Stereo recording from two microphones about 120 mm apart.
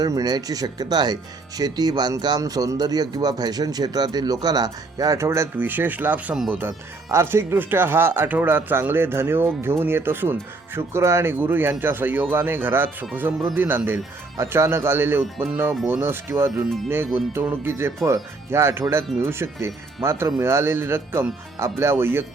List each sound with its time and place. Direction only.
0.0 s speech: 30° right (ahead or behind); by 6.6 s 10° right (ahead or behind)
6.6 s speech: 20° right (ahead or behind)